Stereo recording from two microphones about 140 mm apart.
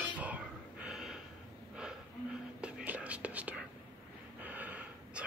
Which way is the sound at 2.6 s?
10° right (ahead or behind).